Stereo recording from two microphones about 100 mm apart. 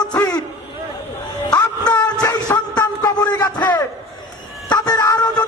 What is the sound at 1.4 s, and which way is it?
Music, 35° left (ahead or behind).